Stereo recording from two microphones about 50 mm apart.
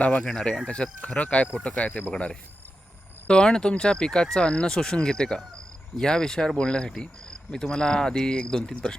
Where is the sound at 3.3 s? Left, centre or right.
Centre.